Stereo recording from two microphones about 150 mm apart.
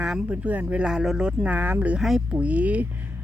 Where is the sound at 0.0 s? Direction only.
5° right (ahead or behind).